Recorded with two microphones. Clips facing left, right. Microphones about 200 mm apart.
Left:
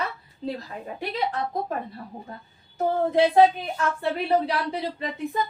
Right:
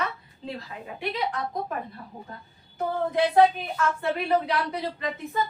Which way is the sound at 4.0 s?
30° left (ahead or behind).